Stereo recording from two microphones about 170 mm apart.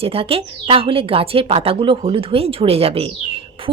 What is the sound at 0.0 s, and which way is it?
A woman's voice, 35° right (ahead or behind).